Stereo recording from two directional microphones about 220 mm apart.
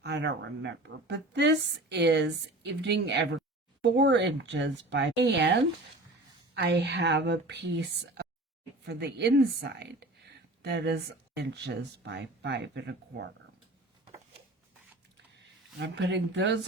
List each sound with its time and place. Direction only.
0.0 s speech: 50° right (ahead or behind)
15.8 s speech: 50° right (ahead or behind)